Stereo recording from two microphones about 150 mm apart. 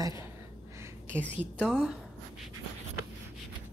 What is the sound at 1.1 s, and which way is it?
Speech, 15° right (ahead or behind).